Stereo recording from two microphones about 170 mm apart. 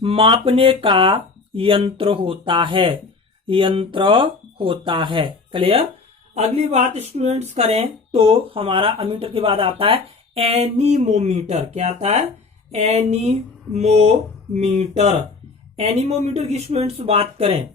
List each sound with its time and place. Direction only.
0.0 s speech: 35° right (ahead or behind)